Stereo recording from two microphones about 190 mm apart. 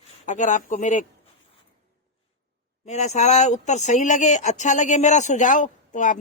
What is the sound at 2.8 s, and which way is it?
Speech, 35° left (ahead or behind).